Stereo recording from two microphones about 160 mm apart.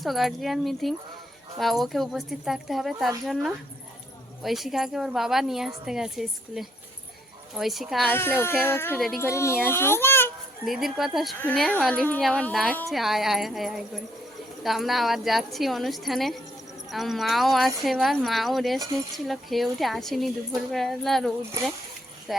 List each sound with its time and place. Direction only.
0.0 s speech: centre (ahead or behind)
4.4 s speech: centre (ahead or behind)
8.0 s speech: 10° left (ahead or behind)
10.7 s speech: centre (ahead or behind)
11.3 s speech: 10° left (ahead or behind)